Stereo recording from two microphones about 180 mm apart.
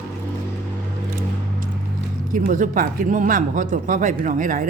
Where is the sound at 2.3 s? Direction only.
50° right (ahead or behind).